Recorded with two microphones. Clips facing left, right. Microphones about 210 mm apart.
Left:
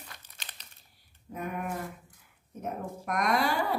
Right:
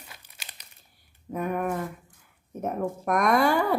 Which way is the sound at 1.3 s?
50° right (ahead or behind).